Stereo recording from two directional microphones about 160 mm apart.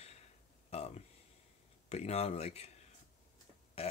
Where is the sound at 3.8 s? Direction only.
40° left (ahead or behind).